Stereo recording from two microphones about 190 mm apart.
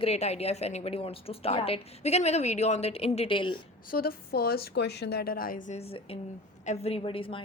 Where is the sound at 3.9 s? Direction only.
50° left (ahead or behind); by 7.4 s 30° left (ahead or behind).